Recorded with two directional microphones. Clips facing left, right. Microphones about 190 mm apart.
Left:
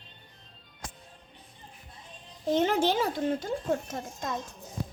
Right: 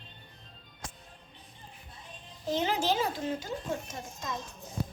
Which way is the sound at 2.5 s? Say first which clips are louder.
Left 4 dB; 55° left (ahead or behind).